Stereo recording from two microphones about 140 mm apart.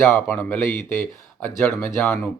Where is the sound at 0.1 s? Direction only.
10° left (ahead or behind).